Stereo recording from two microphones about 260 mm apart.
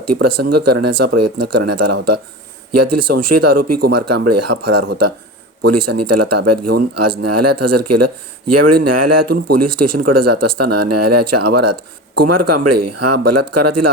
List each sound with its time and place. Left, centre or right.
0.0 s speech: right